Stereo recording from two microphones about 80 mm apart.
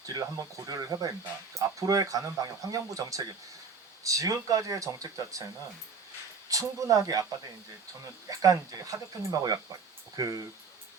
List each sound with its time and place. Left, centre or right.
0.0 s speech: right
6.5 s speech: right
8.3 s speech: right